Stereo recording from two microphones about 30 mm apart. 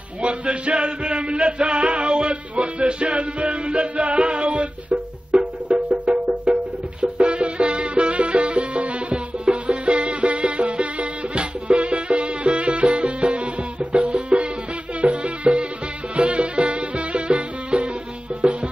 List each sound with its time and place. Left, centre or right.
0.2 s music: right
5.3 s music: right
6.4 s music: right
9.1 s music: right